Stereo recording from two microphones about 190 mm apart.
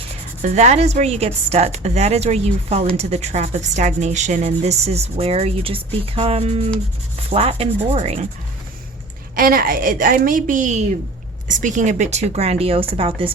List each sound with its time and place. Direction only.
0.4 s a woman's voice: 35° right (ahead or behind)
9.3 s a woman's voice: 50° right (ahead or behind); by 13.3 s 30° right (ahead or behind)